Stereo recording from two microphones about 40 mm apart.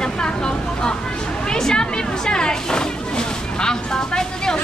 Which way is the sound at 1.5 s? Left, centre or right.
Centre.